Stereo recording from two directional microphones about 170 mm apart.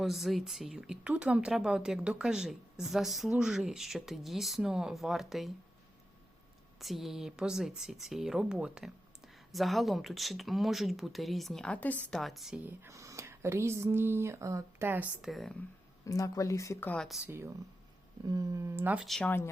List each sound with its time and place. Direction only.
0.0 s speech: centre (ahead or behind)
6.7 s speech: centre (ahead or behind)
16.0 s speech: 20° left (ahead or behind)
16.9 s speech: centre (ahead or behind)
17.2 s speech: 15° right (ahead or behind)
19.0 s speech: centre (ahead or behind)